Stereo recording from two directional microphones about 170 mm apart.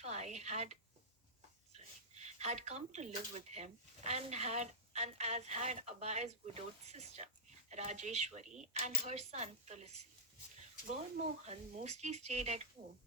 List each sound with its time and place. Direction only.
0.0 s a sound: 40° right (ahead or behind)
2.2 s speech: 40° right (ahead or behind)
11.4 s speech: 40° right (ahead or behind)